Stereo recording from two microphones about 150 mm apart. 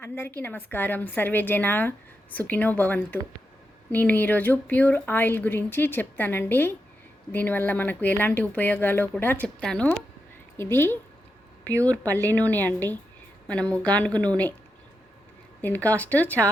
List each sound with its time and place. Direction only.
0.0 s a woman's voice: 15° left (ahead or behind)
15.6 s a woman's voice: 10° left (ahead or behind)